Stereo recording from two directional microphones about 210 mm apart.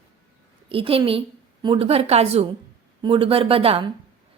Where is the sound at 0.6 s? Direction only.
25° right (ahead or behind).